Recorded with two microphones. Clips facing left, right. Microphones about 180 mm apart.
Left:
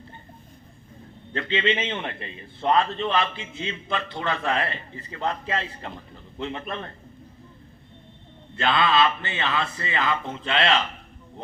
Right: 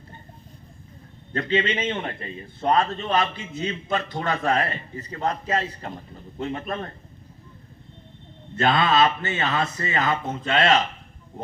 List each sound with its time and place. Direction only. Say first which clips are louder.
1.3 s a man's voice: right 1 dB; 45° right (ahead or behind)
8.5 s a man's voice: right 2 dB; 45° right (ahead or behind)